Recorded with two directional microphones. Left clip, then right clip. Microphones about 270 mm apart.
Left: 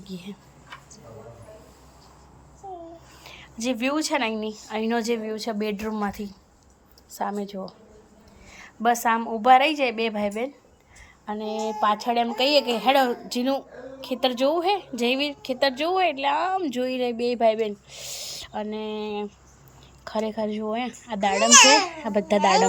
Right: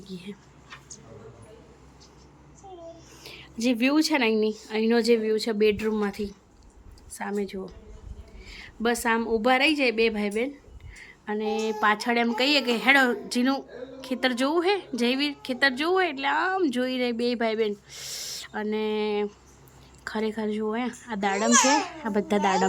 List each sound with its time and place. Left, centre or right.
0.0 s speech: centre
3.2 s speech: centre
18.8 s a sound: right
20.1 s speech: centre